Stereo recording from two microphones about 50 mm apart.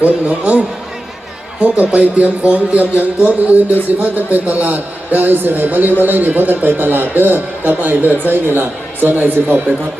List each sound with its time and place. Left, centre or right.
0.0 s speech: right
1.6 s a man's voice: right